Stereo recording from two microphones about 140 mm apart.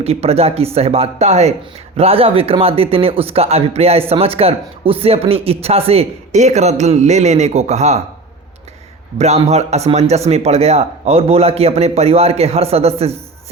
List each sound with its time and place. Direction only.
0.0 s speech: 45° right (ahead or behind)
9.1 s speech: 50° right (ahead or behind)